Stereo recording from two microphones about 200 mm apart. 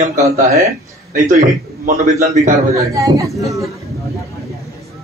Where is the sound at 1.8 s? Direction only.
40° right (ahead or behind).